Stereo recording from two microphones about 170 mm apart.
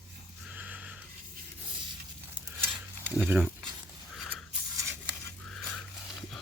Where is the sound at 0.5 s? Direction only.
10° right (ahead or behind).